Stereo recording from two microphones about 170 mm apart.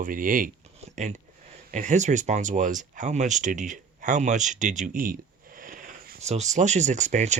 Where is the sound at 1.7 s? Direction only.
45° right (ahead or behind).